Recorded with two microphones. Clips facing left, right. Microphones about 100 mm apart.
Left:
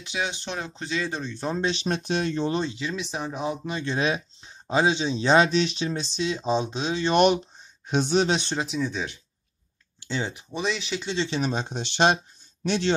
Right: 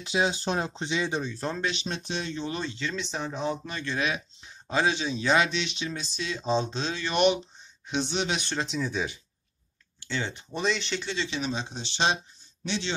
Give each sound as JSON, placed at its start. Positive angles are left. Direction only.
{"t": 0.0, "sound": "speech", "side_deg": -35}
{"t": 0.7, "sound": "speech", "side_deg": -20}
{"t": 1.6, "sound": "speech", "side_deg": 35}
{"t": 1.9, "sound": "speech", "side_deg": 50}
{"t": 2.3, "sound": "speech", "side_deg": 35}
{"t": 2.6, "sound": "speech", "side_deg": 15}
{"t": 4.7, "sound": "speech", "side_deg": 20}
{"t": 7.1, "sound": "speech", "side_deg": 40}
{"t": 8.5, "sound": "speech", "side_deg": 5}
{"t": 10.0, "sound": "speech", "side_deg": 20}
{"t": 10.3, "sound": "speech", "side_deg": 0}
{"t": 11.2, "sound": "speech", "side_deg": 40}